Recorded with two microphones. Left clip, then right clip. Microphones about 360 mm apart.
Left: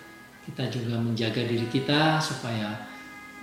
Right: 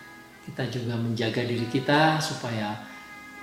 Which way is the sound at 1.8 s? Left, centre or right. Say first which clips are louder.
Right 3 dB; centre.